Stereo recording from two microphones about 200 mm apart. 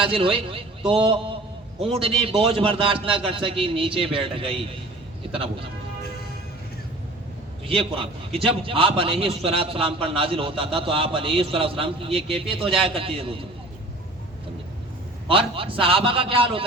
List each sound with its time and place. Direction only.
0.1 s a man's voice: 25° right (ahead or behind)
7.7 s a man's voice: 30° right (ahead or behind)
15.3 s a man's voice: 25° right (ahead or behind)